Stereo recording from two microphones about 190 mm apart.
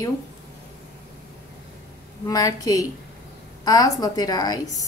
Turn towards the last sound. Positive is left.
turn(degrees=20)  # may be behind; listen again after turning